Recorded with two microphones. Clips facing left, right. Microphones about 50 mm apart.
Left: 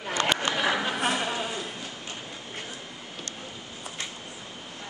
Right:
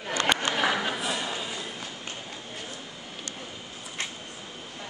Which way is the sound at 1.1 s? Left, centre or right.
Left.